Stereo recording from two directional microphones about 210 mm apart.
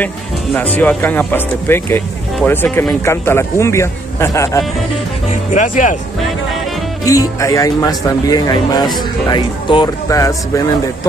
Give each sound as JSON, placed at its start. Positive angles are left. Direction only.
{"t": 0.6, "sound": "speech", "side_deg": 10}
{"t": 5.5, "sound": "speech", "side_deg": 35}
{"t": 7.1, "sound": "speech", "side_deg": 15}